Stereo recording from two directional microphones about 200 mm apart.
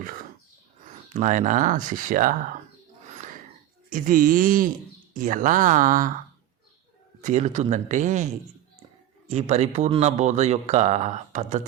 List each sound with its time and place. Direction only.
1.1 s speech: 40° right (ahead or behind)
3.8 s speech: 40° right (ahead or behind)
7.2 s speech: 35° right (ahead or behind)